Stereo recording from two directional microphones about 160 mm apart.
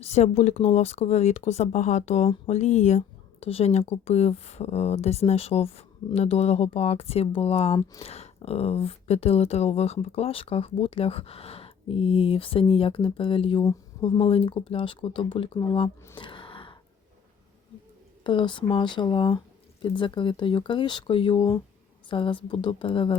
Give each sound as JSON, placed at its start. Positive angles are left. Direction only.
{"t": 0.0, "sound": "speech", "side_deg": 45}
{"t": 16.1, "sound": "a sound", "side_deg": 30}
{"t": 18.2, "sound": "speech", "side_deg": 30}